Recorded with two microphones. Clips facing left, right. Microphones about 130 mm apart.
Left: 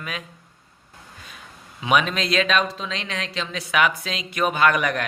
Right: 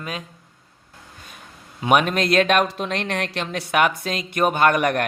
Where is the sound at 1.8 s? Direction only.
50° right (ahead or behind).